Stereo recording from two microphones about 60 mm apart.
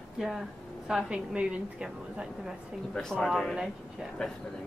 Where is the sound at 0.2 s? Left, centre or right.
Centre.